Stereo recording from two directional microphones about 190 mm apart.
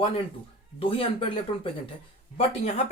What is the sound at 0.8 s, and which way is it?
Speech, 30° left (ahead or behind).